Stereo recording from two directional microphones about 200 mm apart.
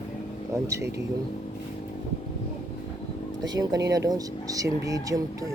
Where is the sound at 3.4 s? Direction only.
20° right (ahead or behind).